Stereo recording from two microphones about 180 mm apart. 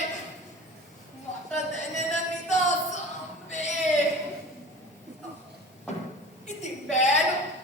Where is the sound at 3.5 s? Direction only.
40° left (ahead or behind).